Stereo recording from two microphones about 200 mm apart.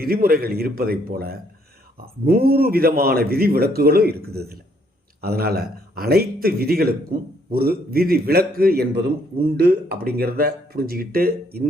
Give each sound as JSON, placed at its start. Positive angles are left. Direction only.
{"t": 0.0, "sound": "a man's voice", "side_deg": -50}